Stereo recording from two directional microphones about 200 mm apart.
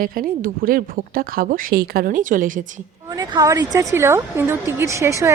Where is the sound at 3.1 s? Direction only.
20° right (ahead or behind).